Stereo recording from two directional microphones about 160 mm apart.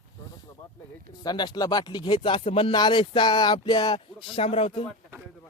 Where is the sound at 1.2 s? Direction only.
25° left (ahead or behind).